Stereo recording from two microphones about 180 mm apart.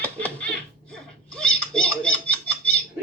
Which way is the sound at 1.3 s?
5° left (ahead or behind).